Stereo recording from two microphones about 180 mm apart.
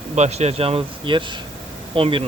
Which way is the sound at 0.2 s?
35° right (ahead or behind).